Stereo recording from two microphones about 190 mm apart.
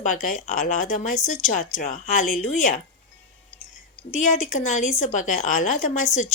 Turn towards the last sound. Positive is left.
turn(degrees=40)  # may be behind; listen again after turning